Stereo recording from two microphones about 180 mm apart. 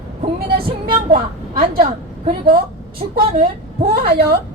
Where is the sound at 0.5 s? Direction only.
60° right (ahead or behind).